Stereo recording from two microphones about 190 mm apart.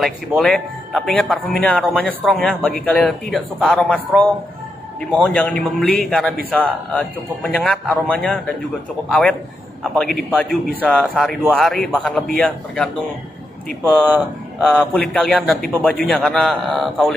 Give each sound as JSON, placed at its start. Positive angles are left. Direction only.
{"t": 0.0, "sound": "a man's voice", "side_deg": 0}
{"t": 10.8, "sound": "a man's voice", "side_deg": 5}
{"t": 14.7, "sound": "a man's voice", "side_deg": 5}